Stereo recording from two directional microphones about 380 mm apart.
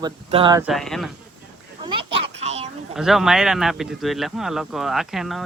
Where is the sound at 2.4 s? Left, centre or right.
Centre.